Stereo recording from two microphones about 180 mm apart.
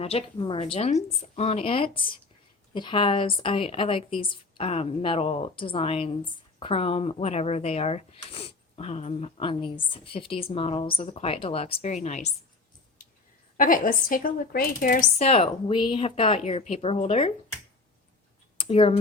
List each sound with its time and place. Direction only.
0.0 s a woman's voice: 35° left (ahead or behind)
13.6 s speech: 50° left (ahead or behind)
18.6 s speech: 30° left (ahead or behind)